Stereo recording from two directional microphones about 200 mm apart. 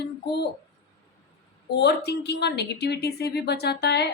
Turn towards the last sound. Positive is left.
turn(degrees=55)  # may be behind; listen again after turning